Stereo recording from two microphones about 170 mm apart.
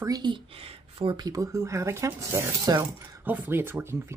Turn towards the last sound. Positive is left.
turn(degrees=-15)  # may be behind; listen again after turning